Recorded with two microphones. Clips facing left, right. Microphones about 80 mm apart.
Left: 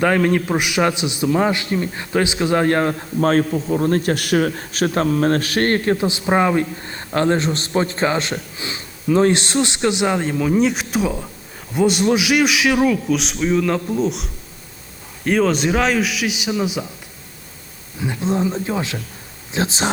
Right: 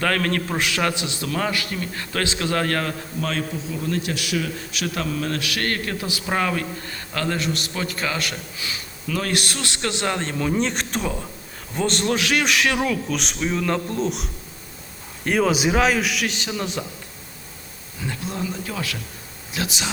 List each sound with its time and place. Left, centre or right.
0.0 s a man's voice: centre
3.2 s a man's voice: left; by 16.8 s centre
18.0 s a man's voice: left